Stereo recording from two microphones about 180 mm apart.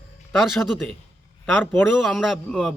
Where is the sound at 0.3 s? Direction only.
Centre (ahead or behind).